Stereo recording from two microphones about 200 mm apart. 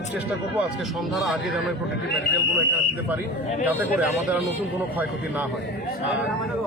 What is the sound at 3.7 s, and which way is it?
Speech, 10° right (ahead or behind).